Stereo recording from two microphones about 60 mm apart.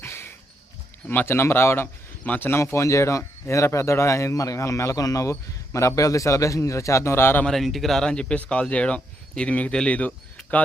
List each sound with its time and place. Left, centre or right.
0.0 s a sound: left
1.0 s speech: left
2.2 s speech: left
2.6 s speech: left
7.4 s speech: centre; by 10.6 s left